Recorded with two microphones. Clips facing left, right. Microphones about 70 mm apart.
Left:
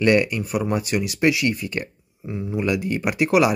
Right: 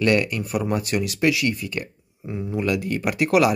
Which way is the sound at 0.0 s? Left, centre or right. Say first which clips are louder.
Left 2 dB; centre.